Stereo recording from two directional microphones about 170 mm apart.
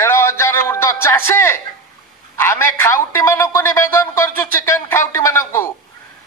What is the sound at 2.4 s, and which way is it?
A man's voice, 15° left (ahead or behind).